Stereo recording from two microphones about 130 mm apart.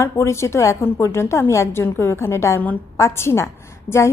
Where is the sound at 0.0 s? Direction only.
20° left (ahead or behind).